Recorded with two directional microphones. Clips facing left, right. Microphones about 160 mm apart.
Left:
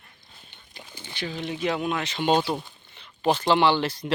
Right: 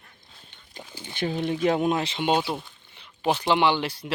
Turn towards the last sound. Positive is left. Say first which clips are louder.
# left 2 dB
turn(degrees=-10)  # may be behind; listen again after turning